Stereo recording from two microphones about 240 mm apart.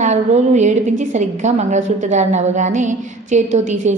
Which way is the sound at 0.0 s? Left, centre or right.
Right.